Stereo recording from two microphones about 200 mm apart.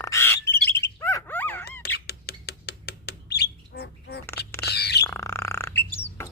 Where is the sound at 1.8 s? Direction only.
55° left (ahead or behind).